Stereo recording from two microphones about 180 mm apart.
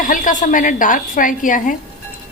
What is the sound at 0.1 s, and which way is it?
A woman's voice, 45° left (ahead or behind).